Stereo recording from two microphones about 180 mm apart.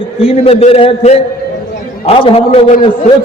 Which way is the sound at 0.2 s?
30° left (ahead or behind).